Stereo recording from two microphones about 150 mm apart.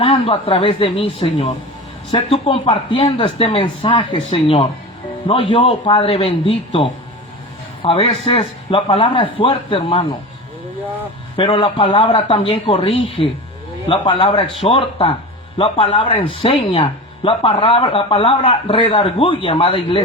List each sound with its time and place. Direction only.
0.0 s a man's voice: 40° left (ahead or behind)
11.3 s a man's voice: 35° left (ahead or behind)